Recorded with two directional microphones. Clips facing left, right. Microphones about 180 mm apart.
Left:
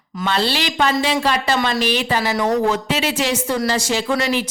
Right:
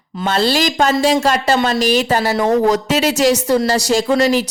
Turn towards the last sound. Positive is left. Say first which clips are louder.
# right 6 dB
turn(degrees=-40)  # may be behind; listen again after turning